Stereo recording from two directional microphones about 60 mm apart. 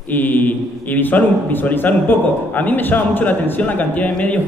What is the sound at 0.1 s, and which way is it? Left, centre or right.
A man's voice, left.